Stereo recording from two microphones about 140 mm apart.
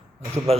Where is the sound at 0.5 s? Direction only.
45° right (ahead or behind).